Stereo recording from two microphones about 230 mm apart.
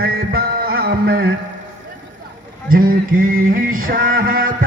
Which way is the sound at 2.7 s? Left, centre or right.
Right.